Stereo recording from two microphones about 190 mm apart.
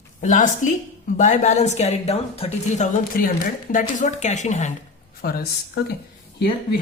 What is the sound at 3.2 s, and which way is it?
A woman's voice, 50° left (ahead or behind).